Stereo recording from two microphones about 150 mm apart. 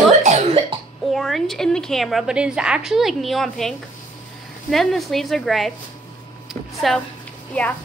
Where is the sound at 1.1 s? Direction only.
Centre (ahead or behind).